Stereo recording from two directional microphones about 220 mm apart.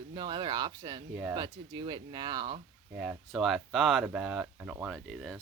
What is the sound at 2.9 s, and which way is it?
Speech, centre (ahead or behind).